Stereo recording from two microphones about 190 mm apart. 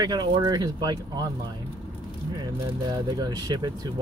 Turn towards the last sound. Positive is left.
turn(degrees=-20)  # may be behind; listen again after turning